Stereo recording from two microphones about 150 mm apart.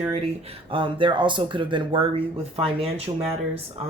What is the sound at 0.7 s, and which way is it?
Speech, 35° right (ahead or behind).